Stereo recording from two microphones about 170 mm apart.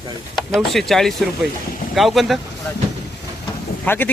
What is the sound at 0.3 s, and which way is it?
Speech, centre (ahead or behind).